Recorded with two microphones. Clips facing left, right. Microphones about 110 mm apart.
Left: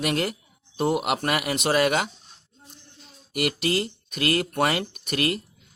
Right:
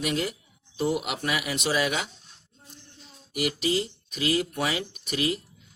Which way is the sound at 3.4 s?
60° left (ahead or behind).